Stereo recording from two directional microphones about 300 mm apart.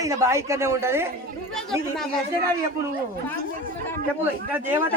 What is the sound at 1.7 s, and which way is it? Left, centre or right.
Speech, centre.